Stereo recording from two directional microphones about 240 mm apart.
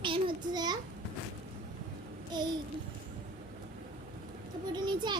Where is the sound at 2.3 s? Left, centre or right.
Centre.